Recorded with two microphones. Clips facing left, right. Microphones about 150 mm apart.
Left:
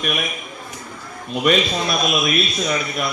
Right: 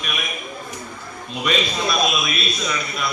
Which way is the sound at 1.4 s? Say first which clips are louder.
Left 4 dB; 50° left (ahead or behind).